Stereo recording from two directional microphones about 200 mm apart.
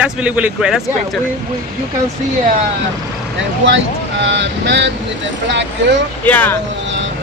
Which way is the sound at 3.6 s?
65° right (ahead or behind).